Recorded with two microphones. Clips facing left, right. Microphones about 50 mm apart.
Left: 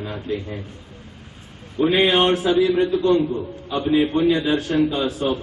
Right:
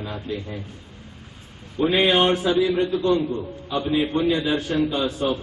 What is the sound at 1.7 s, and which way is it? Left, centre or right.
A man's voice, centre.